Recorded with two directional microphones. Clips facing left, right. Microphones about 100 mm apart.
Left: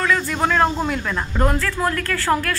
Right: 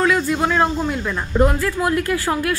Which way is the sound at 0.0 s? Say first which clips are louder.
Right 2 dB; 10° right (ahead or behind).